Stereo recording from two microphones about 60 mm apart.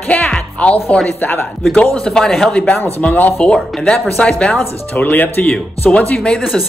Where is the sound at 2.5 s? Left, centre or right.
Centre.